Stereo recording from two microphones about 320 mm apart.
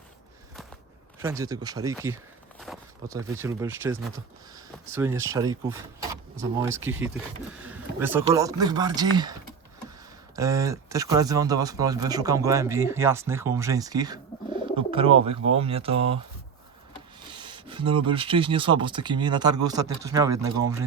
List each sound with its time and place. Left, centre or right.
1.2 s speech: centre
4.5 s a sound: centre
5.3 s speech: centre
10.3 s speech: centre
17.4 s speech: centre